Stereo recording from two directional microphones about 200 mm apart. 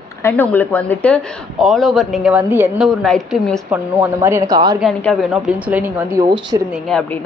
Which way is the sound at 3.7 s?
10° right (ahead or behind).